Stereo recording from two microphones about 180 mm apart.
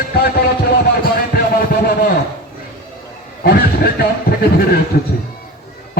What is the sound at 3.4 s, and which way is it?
Speech, 60° left (ahead or behind).